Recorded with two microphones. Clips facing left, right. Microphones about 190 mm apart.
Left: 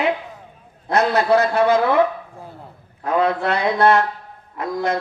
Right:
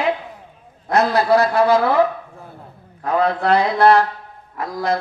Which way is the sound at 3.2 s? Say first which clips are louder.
Right 3 dB; 35° right (ahead or behind).